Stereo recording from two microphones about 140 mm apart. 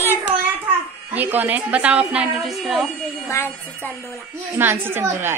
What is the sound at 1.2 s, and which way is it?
A woman's voice, 10° right (ahead or behind).